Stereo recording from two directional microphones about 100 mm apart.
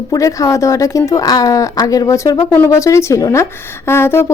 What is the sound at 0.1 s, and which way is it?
Speech, 35° left (ahead or behind).